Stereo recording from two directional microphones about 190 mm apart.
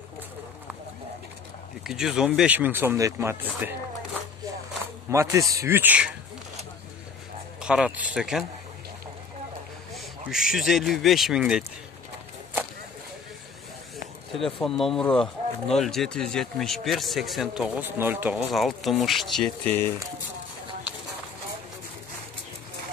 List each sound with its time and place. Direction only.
1.9 s speech: 5° right (ahead or behind)
5.1 s speech: 15° right (ahead or behind)
7.6 s speech: 5° right (ahead or behind)
9.9 s speech: centre (ahead or behind)
14.4 s speech: centre (ahead or behind)